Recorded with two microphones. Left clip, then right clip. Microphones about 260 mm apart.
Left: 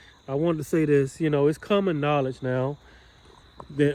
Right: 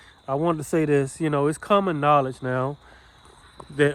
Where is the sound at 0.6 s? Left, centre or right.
Centre.